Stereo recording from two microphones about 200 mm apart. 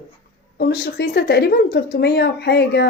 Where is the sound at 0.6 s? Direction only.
50° left (ahead or behind).